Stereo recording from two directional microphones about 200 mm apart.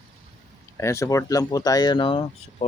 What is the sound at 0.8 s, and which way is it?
Speech, 15° left (ahead or behind).